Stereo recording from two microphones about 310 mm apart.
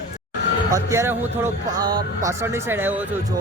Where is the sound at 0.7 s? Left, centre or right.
Centre.